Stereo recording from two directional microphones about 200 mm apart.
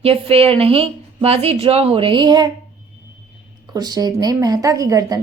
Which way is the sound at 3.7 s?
20° right (ahead or behind).